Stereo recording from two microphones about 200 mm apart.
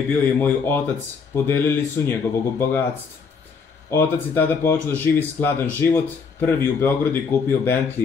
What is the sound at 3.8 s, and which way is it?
Speech, 10° left (ahead or behind).